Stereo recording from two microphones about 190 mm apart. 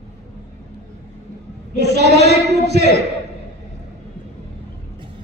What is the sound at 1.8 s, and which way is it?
A man's voice, 60° right (ahead or behind).